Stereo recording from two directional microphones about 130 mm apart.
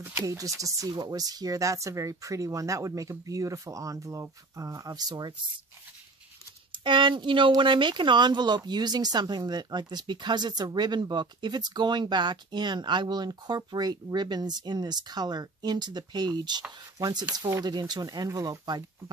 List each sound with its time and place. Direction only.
0.0 s speech: 20° right (ahead or behind)
6.7 s speech: 40° right (ahead or behind)